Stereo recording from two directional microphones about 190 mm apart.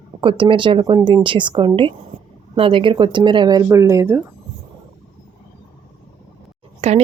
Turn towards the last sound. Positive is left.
turn(degrees=-35)  # may be behind; listen again after turning